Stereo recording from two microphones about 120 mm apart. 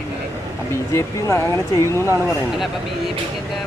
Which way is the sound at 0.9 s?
25° left (ahead or behind).